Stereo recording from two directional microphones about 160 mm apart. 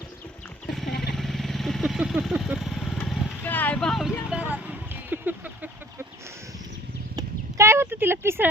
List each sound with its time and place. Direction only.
0.7 s motorcycle: centre (ahead or behind)
1.1 s vehicle: centre (ahead or behind)
7.2 s a sound: 15° right (ahead or behind)